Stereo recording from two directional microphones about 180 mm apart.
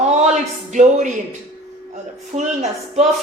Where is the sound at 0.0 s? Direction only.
40° right (ahead or behind).